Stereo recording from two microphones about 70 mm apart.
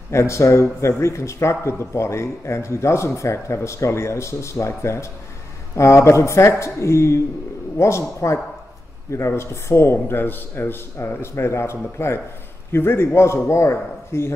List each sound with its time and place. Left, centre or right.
0.1 s a man's voice: left